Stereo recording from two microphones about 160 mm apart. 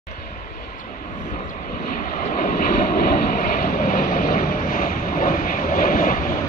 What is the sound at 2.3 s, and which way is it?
Vehicle, 70° left (ahead or behind).